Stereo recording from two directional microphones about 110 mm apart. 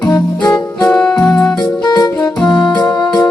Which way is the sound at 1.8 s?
40° left (ahead or behind).